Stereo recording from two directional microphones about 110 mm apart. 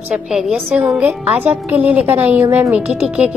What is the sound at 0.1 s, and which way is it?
A woman's voice, 5° right (ahead or behind).